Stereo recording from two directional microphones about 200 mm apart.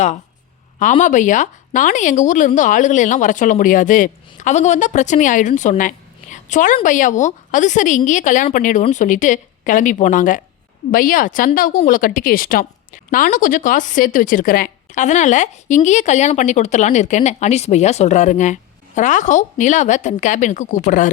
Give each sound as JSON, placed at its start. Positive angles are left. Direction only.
{"t": 0.8, "sound": "a woman's voice", "side_deg": 40}